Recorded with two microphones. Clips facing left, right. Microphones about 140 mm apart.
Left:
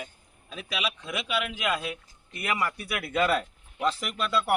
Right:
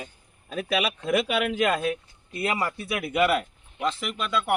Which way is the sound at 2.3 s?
25° right (ahead or behind).